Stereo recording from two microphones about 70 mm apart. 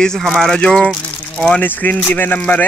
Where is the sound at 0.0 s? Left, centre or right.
Centre.